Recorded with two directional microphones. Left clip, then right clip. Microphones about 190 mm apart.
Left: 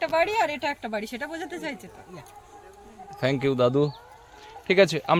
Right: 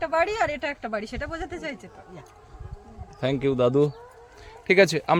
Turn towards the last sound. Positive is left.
turn(degrees=-10)  # may be behind; listen again after turning